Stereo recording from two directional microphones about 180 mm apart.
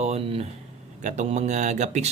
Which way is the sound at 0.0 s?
35° right (ahead or behind).